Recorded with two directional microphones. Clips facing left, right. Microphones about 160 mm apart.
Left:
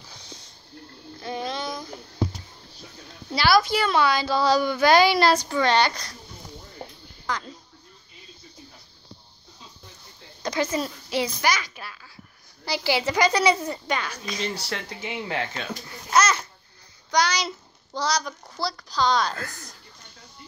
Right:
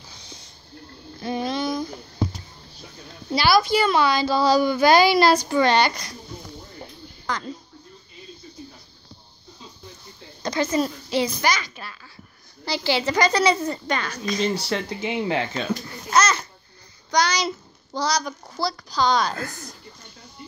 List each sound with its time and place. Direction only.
1.2 s a sound: 10° right (ahead or behind)
3.3 s a woman's voice: centre (ahead or behind)
7.2 s speech: 5° left (ahead or behind)
10.4 s a child's voice: 5° left (ahead or behind)
14.4 s speech: 20° right (ahead or behind)
16.1 s babbling: 10° left (ahead or behind)
17.1 s child singing: 5° left (ahead or behind)
17.9 s a woman's voice: centre (ahead or behind)
19.3 s speech: 20° right (ahead or behind)